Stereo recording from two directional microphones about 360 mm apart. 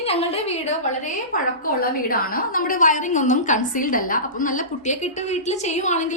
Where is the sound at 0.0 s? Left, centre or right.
Centre.